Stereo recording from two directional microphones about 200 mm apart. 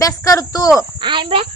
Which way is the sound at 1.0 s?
25° right (ahead or behind).